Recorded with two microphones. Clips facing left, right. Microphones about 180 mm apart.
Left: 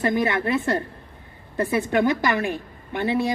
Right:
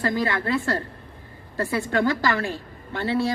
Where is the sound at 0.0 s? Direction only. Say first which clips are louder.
Left 3 dB; 20° left (ahead or behind).